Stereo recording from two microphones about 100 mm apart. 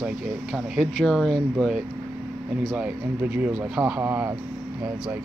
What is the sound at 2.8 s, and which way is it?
Speech, 15° right (ahead or behind).